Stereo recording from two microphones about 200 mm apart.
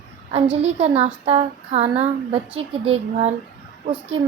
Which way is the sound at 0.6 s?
30° right (ahead or behind).